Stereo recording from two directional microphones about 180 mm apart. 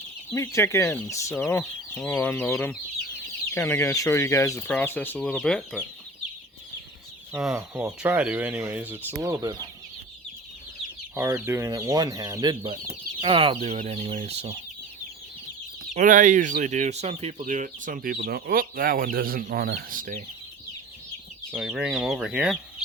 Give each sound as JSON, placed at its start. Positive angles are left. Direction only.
{"t": 0.3, "sound": "speech", "side_deg": 15}
{"t": 7.3, "sound": "speech", "side_deg": -5}
{"t": 11.1, "sound": "speech", "side_deg": -15}
{"t": 16.0, "sound": "speech", "side_deg": -45}
{"t": 21.5, "sound": "speech", "side_deg": -5}